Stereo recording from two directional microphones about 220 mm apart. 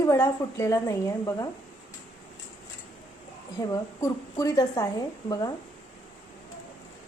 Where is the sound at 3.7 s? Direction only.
15° left (ahead or behind).